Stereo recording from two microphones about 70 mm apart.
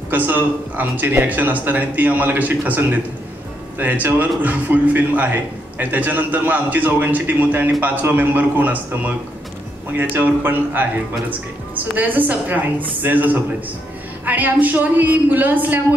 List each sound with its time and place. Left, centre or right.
0.1 s speech: right
11.9 s speech: right